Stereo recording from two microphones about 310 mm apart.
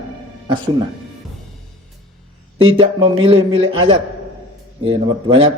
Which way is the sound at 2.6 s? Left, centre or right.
Centre.